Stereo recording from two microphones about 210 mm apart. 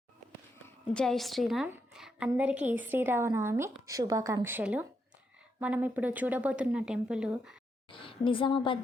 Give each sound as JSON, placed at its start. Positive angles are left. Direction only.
{"t": 0.9, "sound": "a woman's voice", "side_deg": 0}
{"t": 7.9, "sound": "a woman's voice", "side_deg": 25}